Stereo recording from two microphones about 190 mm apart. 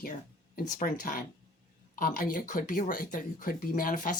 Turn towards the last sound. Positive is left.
turn(degrees=45)  # may be behind; listen again after turning